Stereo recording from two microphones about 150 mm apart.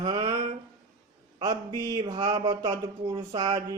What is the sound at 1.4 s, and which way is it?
Speech, 25° right (ahead or behind).